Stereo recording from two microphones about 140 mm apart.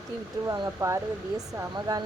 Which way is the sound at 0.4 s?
20° right (ahead or behind).